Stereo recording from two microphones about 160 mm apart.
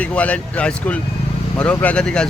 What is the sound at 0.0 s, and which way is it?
Speech, 10° left (ahead or behind).